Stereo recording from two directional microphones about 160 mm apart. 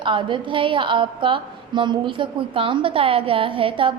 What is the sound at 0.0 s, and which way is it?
A woman's voice, 30° right (ahead or behind).